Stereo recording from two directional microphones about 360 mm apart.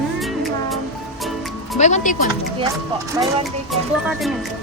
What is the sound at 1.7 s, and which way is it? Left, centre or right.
Speech, centre.